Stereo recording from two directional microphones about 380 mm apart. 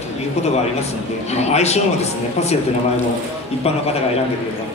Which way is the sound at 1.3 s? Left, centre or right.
Centre.